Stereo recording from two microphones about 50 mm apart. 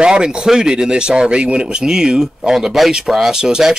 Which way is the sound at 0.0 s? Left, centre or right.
Centre.